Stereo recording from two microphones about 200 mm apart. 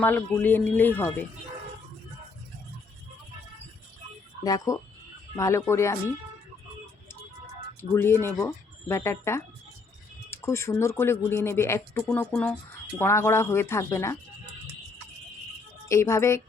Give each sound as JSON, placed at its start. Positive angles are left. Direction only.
{"t": 0.0, "sound": "speech", "side_deg": 10}
{"t": 4.4, "sound": "speech", "side_deg": 15}
{"t": 7.8, "sound": "speech", "side_deg": 10}
{"t": 15.9, "sound": "speech", "side_deg": 15}